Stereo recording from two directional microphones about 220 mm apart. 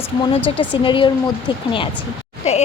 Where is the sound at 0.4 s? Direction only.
25° left (ahead or behind).